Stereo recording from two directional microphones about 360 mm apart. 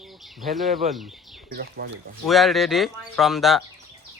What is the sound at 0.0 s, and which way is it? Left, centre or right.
Speech, centre.